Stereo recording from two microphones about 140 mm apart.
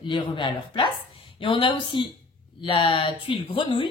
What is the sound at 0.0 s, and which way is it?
Speech, 35° left (ahead or behind).